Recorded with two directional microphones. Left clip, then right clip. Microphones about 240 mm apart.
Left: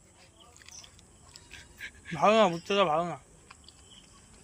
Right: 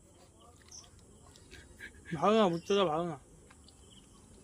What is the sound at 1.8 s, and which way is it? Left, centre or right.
Dog, centre.